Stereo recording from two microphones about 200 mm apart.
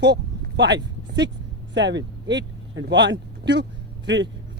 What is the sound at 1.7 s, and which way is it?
Speech, 60° right (ahead or behind).